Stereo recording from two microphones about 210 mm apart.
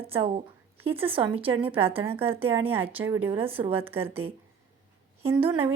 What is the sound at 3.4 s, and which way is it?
A woman's voice, 25° right (ahead or behind).